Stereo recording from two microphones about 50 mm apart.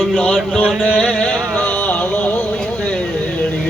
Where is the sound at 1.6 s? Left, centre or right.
Left.